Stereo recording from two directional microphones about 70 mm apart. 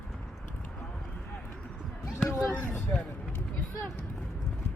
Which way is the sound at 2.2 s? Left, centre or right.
Left.